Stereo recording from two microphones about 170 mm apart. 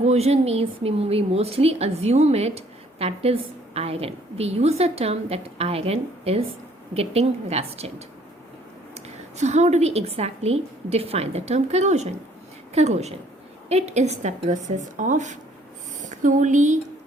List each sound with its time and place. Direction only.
0.0 s a woman's voice: 40° right (ahead or behind)